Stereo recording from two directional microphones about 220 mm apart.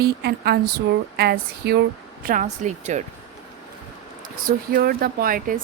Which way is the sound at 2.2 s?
35° right (ahead or behind).